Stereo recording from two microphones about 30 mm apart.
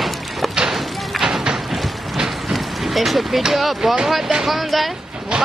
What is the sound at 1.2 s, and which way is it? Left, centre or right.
Music, centre.